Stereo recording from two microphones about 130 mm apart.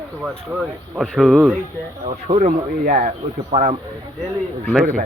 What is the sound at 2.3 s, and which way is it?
Speech, 80° right.